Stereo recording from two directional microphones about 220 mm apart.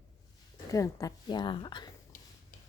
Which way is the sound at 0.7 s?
15° left (ahead or behind).